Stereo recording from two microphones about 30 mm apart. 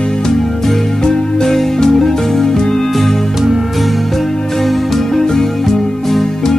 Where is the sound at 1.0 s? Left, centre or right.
Centre.